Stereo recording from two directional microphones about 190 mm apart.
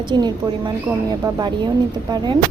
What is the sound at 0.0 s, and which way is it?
Speech, 25° right (ahead or behind).